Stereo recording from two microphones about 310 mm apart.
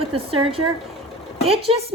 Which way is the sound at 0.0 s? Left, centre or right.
Centre.